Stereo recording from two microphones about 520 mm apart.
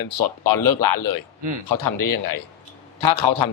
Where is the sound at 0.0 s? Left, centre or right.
Left.